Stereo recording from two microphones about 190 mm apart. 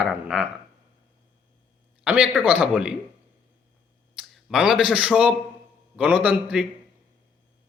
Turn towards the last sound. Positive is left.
turn(degrees=-5)  # may be behind; listen again after turning